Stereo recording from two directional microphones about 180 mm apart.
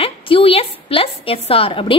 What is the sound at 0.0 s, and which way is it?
A woman's voice, 30° left (ahead or behind).